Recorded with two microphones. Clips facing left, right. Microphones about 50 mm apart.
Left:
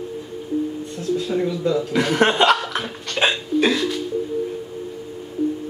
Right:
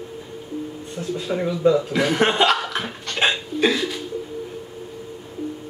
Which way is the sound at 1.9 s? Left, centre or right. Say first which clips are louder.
Left 1 dB; centre.